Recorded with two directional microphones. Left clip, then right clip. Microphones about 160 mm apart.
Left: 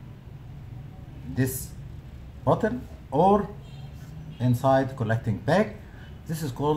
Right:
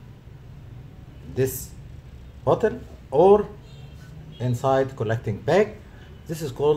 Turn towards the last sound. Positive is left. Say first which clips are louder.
# right 5 dB
turn(degrees=-20)  # may be behind; listen again after turning